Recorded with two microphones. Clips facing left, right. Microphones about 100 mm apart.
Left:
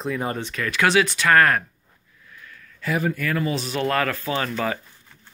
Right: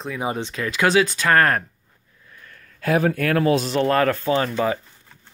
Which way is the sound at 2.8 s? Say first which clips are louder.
Right 5 dB; 60° right (ahead or behind).